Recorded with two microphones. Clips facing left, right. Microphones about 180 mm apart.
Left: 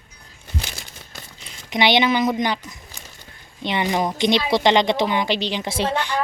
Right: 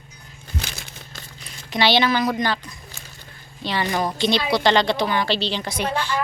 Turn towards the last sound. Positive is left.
turn(degrees=20)  # may be behind; listen again after turning